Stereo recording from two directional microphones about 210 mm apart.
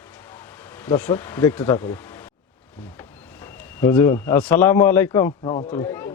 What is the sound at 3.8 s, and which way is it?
A man's voice, 10° left (ahead or behind).